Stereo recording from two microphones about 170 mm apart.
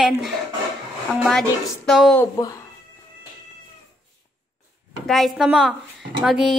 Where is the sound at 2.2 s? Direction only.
20° left (ahead or behind).